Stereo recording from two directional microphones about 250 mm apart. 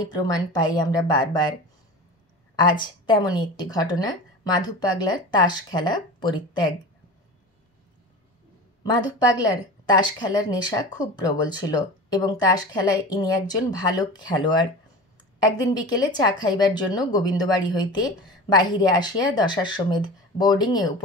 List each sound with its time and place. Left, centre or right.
0.0 s speech: centre
2.5 s speech: centre
8.9 s speech: centre